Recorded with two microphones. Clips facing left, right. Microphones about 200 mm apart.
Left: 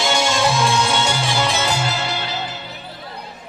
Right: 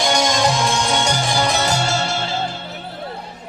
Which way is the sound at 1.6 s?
40° right (ahead or behind).